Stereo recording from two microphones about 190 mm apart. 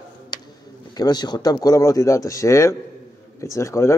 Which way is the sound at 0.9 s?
20° left (ahead or behind).